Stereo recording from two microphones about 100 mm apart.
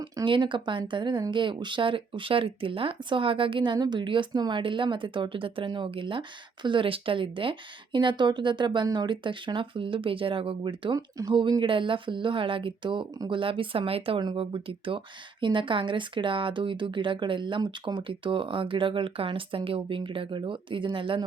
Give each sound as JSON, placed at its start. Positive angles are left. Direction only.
{"t": 0.3, "sound": "speech", "side_deg": -55}
{"t": 14.2, "sound": "speech", "side_deg": -50}